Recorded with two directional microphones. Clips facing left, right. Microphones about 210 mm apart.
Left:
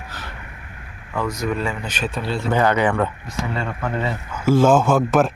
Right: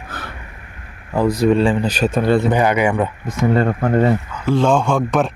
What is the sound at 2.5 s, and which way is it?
Speech, 15° right (ahead or behind).